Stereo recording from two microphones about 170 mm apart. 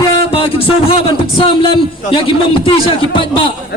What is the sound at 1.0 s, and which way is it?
A man's voice, 30° left (ahead or behind).